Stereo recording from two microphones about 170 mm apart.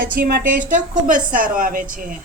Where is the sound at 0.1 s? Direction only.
60° right (ahead or behind).